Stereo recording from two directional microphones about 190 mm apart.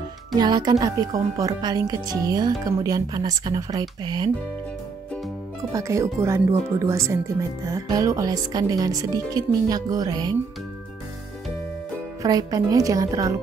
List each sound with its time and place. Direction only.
0.4 s speech: 20° right (ahead or behind)
5.7 s speech: 15° right (ahead or behind)
12.2 s speech: 20° right (ahead or behind)